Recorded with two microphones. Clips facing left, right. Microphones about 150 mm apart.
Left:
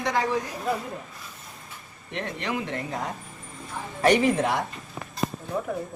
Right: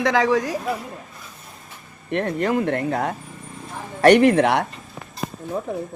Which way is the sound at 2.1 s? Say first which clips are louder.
Right 9 dB; 50° right (ahead or behind).